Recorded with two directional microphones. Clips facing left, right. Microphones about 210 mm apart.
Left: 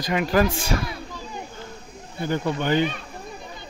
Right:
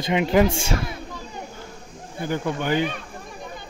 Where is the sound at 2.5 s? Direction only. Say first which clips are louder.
Left 1 dB; 10° right (ahead or behind).